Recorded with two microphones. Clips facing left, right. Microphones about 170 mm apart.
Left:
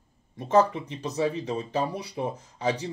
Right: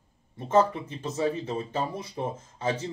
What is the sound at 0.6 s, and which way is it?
Speech, 20° left (ahead or behind).